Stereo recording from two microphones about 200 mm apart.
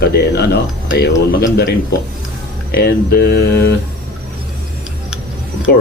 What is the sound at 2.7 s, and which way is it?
Speech, 50° left (ahead or behind).